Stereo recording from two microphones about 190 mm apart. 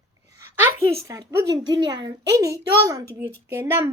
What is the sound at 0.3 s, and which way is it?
A woman's voice, 15° right (ahead or behind).